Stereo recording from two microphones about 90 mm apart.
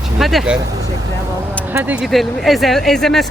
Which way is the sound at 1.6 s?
20° right (ahead or behind).